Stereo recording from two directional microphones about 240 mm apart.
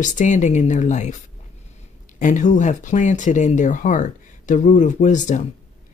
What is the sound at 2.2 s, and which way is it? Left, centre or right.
Speech, left.